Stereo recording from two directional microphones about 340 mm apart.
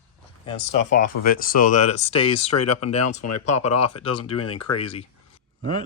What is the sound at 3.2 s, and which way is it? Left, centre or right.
Speech, left.